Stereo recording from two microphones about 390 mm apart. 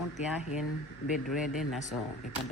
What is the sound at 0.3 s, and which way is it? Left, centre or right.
Speech, centre.